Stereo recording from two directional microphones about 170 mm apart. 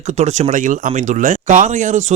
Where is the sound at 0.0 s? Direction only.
45° right (ahead or behind).